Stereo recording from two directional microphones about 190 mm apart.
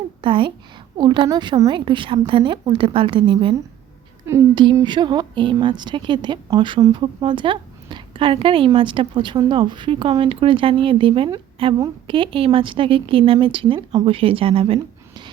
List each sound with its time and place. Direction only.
0.2 s a woman's voice: 25° right (ahead or behind)